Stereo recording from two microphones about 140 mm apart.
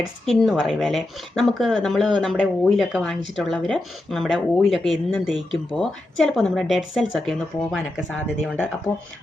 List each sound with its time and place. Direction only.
0.0 s speech: centre (ahead or behind)
8.9 s speech: 15° left (ahead or behind)